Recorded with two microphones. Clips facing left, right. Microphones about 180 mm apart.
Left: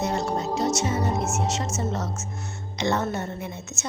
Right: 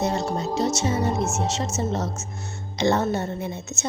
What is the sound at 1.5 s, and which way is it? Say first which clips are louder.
Speech: right 2 dB; 25° right (ahead or behind).